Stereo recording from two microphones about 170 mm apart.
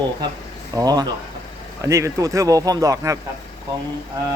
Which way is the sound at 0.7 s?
20° right (ahead or behind).